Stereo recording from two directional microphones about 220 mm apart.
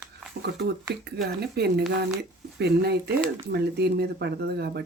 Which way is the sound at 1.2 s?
45° right (ahead or behind).